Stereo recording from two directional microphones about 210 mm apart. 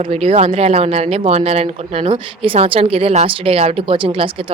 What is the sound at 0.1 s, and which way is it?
Speech, 30° right (ahead or behind).